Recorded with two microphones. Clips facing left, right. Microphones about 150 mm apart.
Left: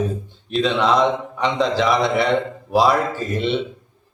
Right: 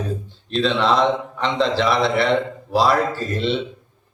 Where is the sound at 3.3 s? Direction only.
15° left (ahead or behind).